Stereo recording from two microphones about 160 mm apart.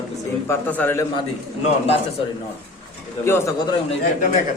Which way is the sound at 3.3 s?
15° left (ahead or behind).